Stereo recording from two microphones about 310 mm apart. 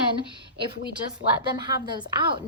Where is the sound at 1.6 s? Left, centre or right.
Centre.